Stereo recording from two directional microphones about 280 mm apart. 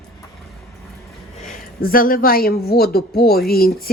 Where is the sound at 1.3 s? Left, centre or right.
Left.